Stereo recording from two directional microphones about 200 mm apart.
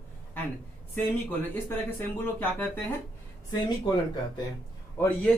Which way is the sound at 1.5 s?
10° left (ahead or behind).